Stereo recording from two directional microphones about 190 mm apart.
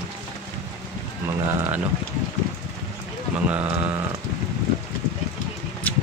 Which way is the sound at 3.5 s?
10° right (ahead or behind).